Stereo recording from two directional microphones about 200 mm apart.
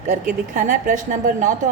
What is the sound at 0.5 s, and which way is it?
A woman's voice, 40° right (ahead or behind).